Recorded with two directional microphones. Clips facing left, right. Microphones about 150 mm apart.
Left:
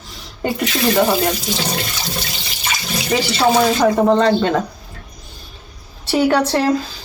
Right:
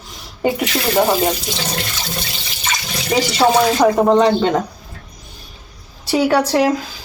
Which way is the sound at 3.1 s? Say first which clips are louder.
Right 1 dB; 15° right (ahead or behind).